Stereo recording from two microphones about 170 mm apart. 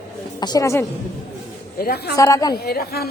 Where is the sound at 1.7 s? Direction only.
65° left (ahead or behind).